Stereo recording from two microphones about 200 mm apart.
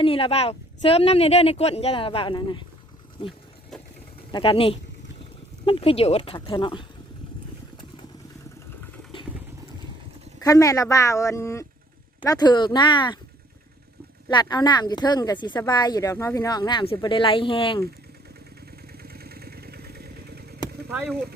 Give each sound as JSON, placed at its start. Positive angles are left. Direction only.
{"t": 0.0, "sound": "speech", "side_deg": 25}
{"t": 4.3, "sound": "speech", "side_deg": 25}
{"t": 10.4, "sound": "speech", "side_deg": 15}
{"t": 14.3, "sound": "speech", "side_deg": 20}
{"t": 19.0, "sound": "vehicle", "side_deg": -50}